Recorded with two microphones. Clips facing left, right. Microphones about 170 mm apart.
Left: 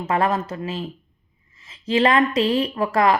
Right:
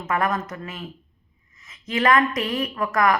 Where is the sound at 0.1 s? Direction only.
30° left (ahead or behind).